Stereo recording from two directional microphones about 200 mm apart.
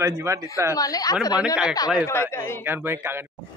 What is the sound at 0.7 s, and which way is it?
Speech, 20° left (ahead or behind).